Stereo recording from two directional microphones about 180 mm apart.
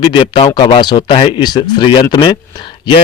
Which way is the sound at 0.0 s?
25° left (ahead or behind).